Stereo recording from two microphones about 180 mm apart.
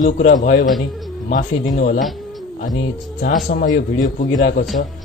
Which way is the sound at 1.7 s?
45° left (ahead or behind).